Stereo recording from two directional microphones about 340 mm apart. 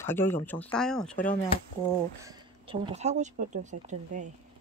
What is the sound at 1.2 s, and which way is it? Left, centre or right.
Speech, left.